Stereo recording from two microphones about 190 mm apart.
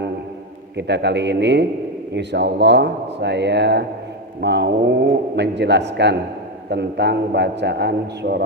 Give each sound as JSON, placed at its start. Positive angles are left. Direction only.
{"t": 0.8, "sound": "a man's voice", "side_deg": -65}